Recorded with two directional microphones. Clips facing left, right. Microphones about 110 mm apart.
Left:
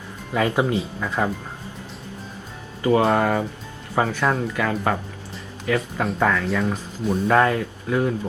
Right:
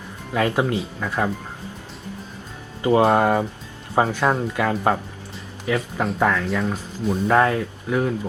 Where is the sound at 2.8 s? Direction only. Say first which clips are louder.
Right 2 dB; 30° right (ahead or behind).